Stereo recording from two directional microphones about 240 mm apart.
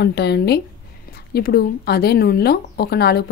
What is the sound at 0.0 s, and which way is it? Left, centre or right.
Speech, left.